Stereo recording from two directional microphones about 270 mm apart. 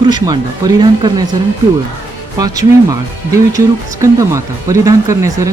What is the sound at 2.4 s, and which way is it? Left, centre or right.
Speech, centre.